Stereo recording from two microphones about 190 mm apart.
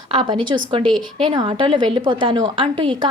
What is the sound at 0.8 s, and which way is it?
Speech, 5° left (ahead or behind).